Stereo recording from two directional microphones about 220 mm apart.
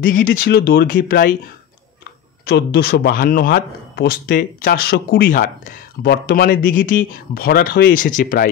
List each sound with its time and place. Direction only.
0.0 s speech: 40° left (ahead or behind)
2.4 s speech: 45° left (ahead or behind)